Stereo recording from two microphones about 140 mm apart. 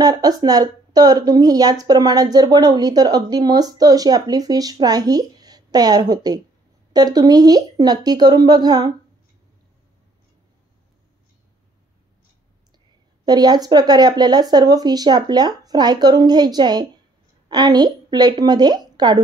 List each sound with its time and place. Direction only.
0.0 s speech: 25° right (ahead or behind)
13.2 s a woman's voice: 30° right (ahead or behind)